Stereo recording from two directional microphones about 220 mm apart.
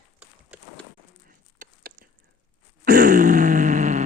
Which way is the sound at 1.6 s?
35° right (ahead or behind).